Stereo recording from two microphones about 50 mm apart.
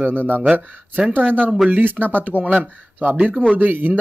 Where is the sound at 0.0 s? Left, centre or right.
Right.